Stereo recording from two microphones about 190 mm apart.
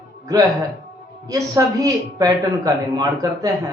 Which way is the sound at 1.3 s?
15° right (ahead or behind).